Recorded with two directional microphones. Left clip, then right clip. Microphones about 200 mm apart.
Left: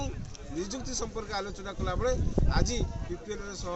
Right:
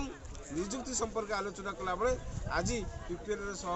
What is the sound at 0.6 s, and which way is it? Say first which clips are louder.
A man's voice: left 1 dB; centre (ahead or behind).